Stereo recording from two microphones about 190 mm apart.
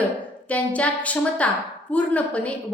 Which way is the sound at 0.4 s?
5° left (ahead or behind).